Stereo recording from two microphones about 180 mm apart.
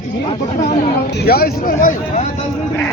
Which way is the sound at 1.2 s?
60° left (ahead or behind).